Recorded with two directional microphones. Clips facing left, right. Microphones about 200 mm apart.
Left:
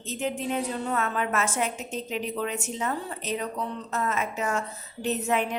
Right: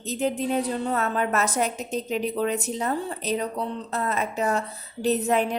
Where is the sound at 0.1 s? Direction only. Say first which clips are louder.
Right 4 dB; 35° right (ahead or behind).